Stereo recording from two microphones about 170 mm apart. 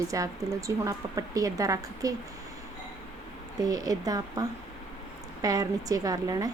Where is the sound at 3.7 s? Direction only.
20° right (ahead or behind).